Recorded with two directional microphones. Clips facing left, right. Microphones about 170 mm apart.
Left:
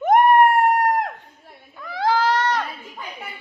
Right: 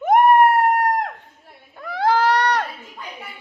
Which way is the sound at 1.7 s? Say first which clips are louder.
Right 2 dB; 60° right (ahead or behind).